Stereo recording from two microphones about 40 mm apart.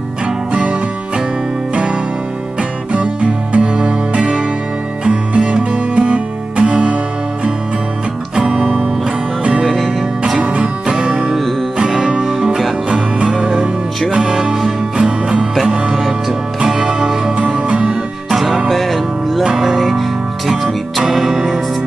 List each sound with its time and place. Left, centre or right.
2.9 s music: right
8.5 s music: right
9.7 s music: centre
10.6 s music: centre
15.0 s music: right
15.9 s music: centre
16.5 s music: centre
21.0 s music: centre